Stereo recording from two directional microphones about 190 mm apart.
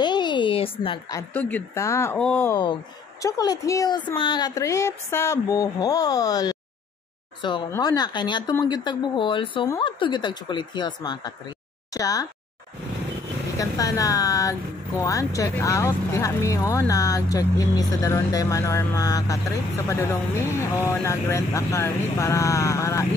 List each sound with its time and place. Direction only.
0.0 s a sound: 25° left (ahead or behind)
1.3 s speech: 10° left (ahead or behind)
7.7 s speech: 20° left (ahead or behind)
13.6 s speech: 20° left (ahead or behind)